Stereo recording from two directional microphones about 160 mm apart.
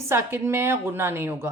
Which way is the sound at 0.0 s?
15° right (ahead or behind).